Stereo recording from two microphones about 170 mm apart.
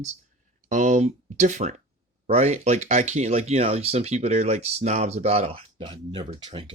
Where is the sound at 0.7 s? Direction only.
45° right (ahead or behind).